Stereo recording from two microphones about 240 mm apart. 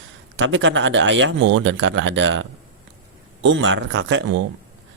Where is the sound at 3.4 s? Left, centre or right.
Right.